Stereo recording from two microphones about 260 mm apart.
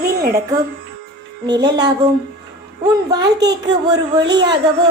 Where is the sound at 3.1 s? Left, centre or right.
Centre.